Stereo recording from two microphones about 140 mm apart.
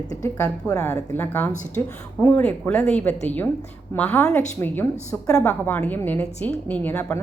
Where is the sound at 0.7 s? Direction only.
20° left (ahead or behind).